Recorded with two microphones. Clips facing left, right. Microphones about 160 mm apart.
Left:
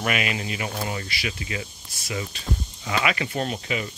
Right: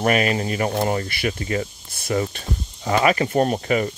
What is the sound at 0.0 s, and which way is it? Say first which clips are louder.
Speech: right 7 dB; 40° right (ahead or behind).